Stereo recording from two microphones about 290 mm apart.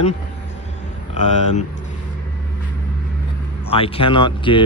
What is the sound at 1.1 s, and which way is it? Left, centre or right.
Speech, left.